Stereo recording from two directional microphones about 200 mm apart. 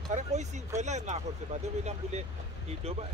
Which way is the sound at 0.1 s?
35° right (ahead or behind).